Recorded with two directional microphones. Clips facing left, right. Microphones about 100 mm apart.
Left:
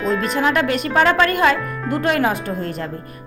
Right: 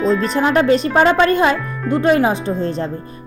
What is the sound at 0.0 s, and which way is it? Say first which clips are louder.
Speech: right 3 dB; 30° right (ahead or behind).